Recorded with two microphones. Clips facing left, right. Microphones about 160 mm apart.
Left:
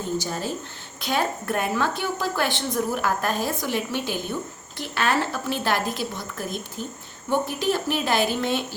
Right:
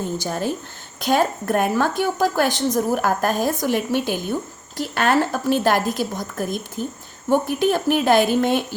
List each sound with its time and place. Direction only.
0.2 s a woman's voice: 55° right (ahead or behind)